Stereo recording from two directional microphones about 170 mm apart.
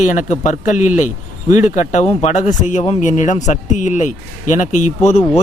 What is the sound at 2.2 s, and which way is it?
Speech, 45° left (ahead or behind).